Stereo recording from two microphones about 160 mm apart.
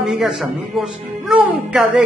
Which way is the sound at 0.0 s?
Centre (ahead or behind).